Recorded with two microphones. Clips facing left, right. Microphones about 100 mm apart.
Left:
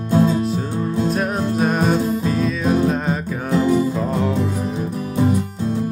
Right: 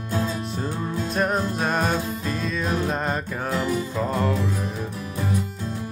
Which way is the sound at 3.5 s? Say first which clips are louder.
Left 9 dB; 30° left (ahead or behind).